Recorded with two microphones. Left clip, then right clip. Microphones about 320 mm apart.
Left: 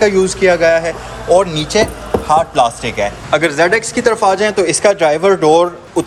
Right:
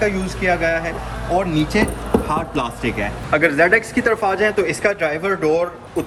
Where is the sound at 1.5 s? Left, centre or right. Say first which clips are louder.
Left 5 dB; left.